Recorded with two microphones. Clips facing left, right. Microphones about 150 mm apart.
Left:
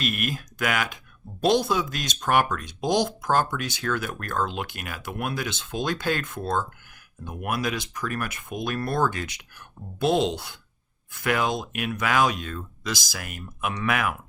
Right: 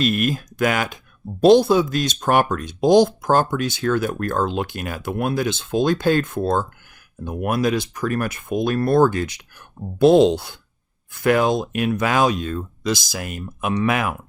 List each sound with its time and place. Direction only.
0.0 s speech: 30° right (ahead or behind)